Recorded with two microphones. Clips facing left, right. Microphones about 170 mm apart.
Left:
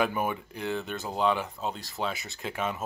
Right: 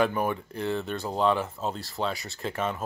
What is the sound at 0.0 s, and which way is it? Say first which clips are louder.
Speech: right 3 dB; 5° left (ahead or behind).